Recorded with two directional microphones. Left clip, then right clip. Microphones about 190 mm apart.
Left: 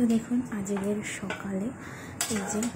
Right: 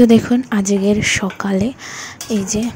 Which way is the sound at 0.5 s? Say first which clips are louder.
Right 15 dB; 45° right (ahead or behind).